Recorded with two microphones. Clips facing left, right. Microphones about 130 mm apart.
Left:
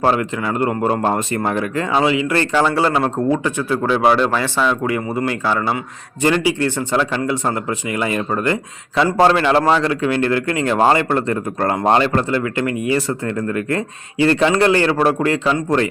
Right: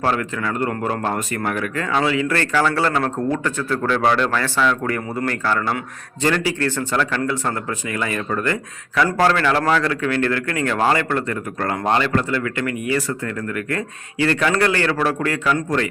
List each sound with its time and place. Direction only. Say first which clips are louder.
0.0 s speech: left 4 dB; 20° left (ahead or behind)